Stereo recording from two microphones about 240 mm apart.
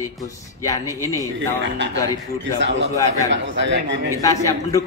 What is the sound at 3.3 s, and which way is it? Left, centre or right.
Speech, right.